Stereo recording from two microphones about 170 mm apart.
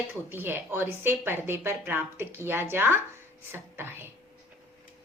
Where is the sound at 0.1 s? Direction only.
10° right (ahead or behind).